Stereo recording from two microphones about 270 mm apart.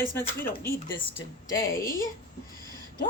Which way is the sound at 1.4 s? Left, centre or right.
Centre.